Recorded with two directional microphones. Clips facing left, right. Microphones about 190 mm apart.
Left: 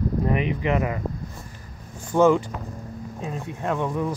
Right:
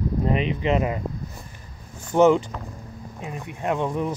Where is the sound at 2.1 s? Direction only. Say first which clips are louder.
Right 1 dB; 20° right (ahead or behind).